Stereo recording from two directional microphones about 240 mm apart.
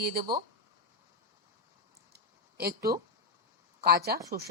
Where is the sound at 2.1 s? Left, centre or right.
Right.